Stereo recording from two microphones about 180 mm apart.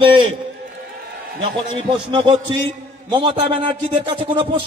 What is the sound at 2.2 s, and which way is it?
Speech, 25° right (ahead or behind).